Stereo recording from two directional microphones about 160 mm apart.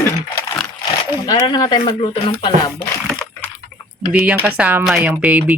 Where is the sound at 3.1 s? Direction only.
5° left (ahead or behind).